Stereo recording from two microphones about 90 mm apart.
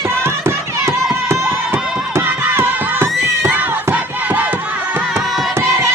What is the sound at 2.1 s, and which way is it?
Crowd, 25° right (ahead or behind).